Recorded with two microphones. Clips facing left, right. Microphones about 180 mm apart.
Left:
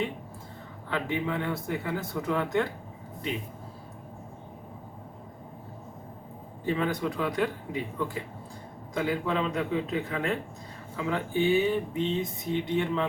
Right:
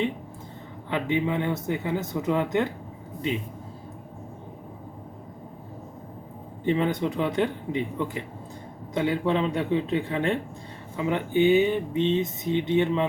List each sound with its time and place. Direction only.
0.9 s speech: 20° right (ahead or behind)
6.7 s speech: 20° right (ahead or behind)